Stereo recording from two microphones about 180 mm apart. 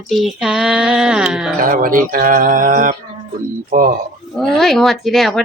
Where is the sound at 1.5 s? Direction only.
50° right (ahead or behind).